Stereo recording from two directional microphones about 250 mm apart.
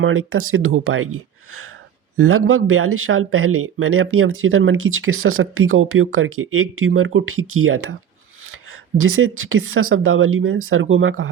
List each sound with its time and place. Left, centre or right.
0.0 s speech: right
9.0 s speech: right